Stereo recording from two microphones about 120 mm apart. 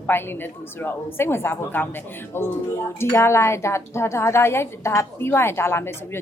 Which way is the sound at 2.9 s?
20° left (ahead or behind).